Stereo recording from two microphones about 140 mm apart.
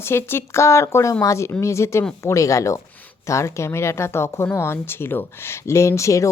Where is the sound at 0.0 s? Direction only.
15° left (ahead or behind).